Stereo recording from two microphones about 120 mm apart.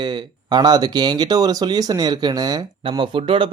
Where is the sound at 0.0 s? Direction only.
40° right (ahead or behind).